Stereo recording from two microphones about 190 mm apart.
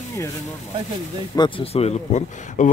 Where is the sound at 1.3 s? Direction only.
25° left (ahead or behind).